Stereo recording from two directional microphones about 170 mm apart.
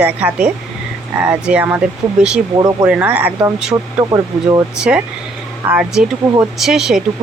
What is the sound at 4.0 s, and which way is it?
Speech, 25° right (ahead or behind).